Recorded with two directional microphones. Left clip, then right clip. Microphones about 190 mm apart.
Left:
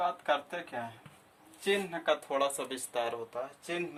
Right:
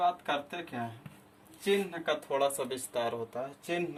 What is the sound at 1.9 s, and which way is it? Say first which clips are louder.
Speech: left 1 dB; 30° left (ahead or behind).